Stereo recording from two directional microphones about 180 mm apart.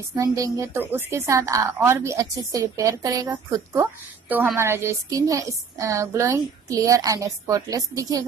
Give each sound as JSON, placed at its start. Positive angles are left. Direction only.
{"t": 0.1, "sound": "a woman's voice", "side_deg": -15}